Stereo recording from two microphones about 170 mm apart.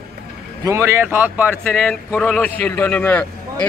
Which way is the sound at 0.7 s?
15° right (ahead or behind).